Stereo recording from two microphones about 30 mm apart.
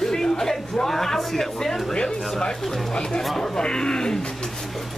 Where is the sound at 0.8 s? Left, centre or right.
Centre.